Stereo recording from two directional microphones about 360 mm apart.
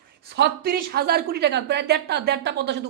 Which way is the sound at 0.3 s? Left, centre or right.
Right.